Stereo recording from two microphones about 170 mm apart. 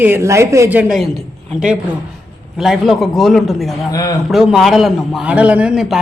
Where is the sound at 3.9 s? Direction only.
20° left (ahead or behind).